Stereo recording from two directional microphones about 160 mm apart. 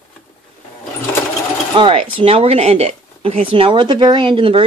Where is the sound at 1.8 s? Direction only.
35° right (ahead or behind).